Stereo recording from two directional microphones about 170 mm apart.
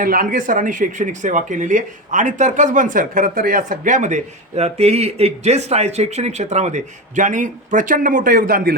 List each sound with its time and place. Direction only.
0.0 s speech: 55° right (ahead or behind)